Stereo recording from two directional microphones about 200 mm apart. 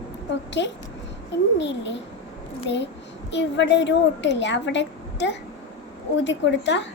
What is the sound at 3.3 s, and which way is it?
A woman's voice, 60° left (ahead or behind).